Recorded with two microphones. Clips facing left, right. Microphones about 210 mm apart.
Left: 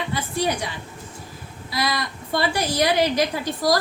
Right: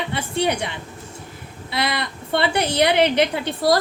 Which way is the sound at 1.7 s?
25° right (ahead or behind).